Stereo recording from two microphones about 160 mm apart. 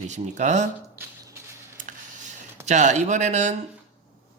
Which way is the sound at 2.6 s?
50° right (ahead or behind).